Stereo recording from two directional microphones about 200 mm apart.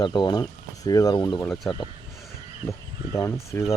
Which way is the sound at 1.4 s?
5° left (ahead or behind).